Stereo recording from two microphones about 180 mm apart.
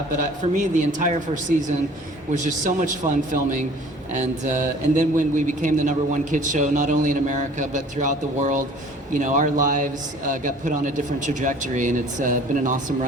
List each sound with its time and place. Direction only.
0.2 s a man's voice: 45° right (ahead or behind)
4.1 s a man's voice: 45° right (ahead or behind)